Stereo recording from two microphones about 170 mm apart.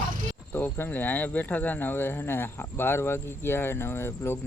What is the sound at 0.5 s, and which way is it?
Speech, 10° left (ahead or behind).